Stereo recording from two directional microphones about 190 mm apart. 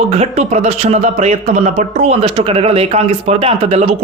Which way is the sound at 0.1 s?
35° right (ahead or behind).